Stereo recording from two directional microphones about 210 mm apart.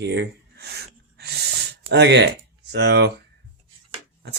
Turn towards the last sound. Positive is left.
turn(degrees=-55)  # may be behind; listen again after turning